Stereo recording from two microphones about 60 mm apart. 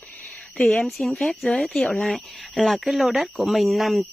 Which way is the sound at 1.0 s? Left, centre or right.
Centre.